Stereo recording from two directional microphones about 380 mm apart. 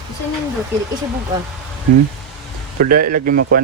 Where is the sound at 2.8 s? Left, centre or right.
Right.